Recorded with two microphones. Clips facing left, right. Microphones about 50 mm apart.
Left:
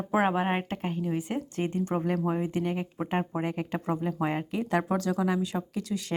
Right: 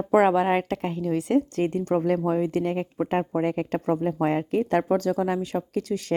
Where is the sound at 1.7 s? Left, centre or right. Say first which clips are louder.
Right 5 dB; right.